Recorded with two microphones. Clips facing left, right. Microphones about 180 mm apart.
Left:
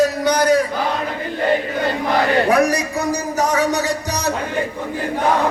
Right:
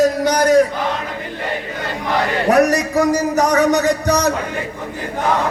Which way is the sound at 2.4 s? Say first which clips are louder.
Right 2 dB; 45° right (ahead or behind).